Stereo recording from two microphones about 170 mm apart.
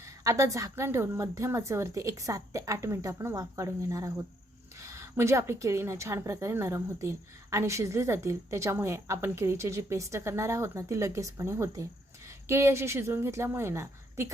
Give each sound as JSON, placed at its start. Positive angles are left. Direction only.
{"t": 0.3, "sound": "a woman's voice", "side_deg": -20}